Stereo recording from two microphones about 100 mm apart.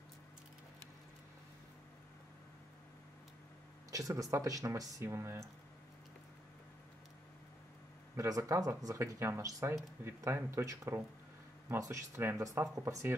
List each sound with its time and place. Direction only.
3.9 s speech: 35° right (ahead or behind)
5.0 s speech: 25° right (ahead or behind)
8.2 s speech: 30° right (ahead or behind)